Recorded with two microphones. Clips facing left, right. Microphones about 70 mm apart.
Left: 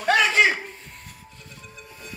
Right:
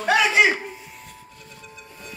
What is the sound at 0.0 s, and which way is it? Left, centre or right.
Chuckle, centre.